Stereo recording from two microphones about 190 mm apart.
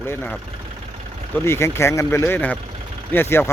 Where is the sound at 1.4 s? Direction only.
15° left (ahead or behind).